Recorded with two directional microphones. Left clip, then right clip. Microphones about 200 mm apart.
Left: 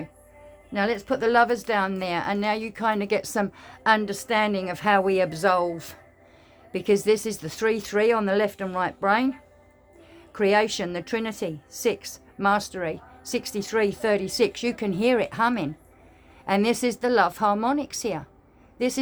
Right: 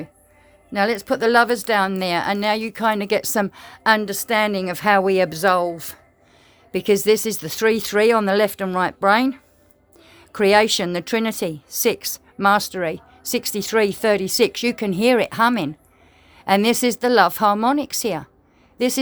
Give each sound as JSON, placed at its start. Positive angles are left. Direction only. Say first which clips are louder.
{"t": 0.7, "sound": "a woman's voice", "louder": "right 5 dB", "side_deg": -50}